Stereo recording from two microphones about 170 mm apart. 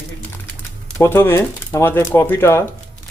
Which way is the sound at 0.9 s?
15° left (ahead or behind).